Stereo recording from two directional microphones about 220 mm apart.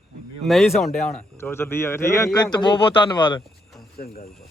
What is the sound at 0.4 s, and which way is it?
Speech, centre (ahead or behind).